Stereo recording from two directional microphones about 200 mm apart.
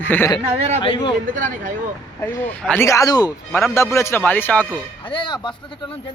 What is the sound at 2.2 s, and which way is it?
Speech, 10° left (ahead or behind).